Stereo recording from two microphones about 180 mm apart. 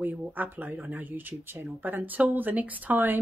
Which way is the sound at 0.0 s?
10° right (ahead or behind).